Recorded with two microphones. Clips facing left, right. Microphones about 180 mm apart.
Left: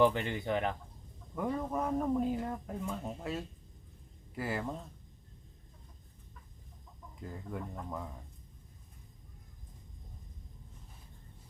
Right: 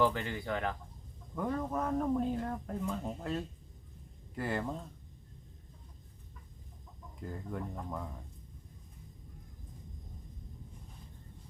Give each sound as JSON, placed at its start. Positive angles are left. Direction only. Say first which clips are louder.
{"t": 0.0, "sound": "speech", "louder": "left 3 dB", "side_deg": 20}
{"t": 7.2, "sound": "speech", "louder": "right 1 dB", "side_deg": 0}